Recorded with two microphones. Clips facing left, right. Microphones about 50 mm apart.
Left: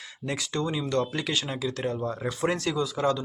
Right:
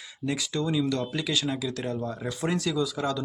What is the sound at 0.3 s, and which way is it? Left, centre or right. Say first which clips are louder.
Speech: right 1 dB; left.